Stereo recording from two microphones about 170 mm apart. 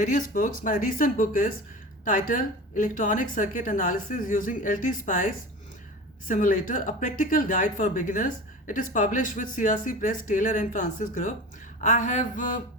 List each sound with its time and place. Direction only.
0.0 s speech: 50° left (ahead or behind)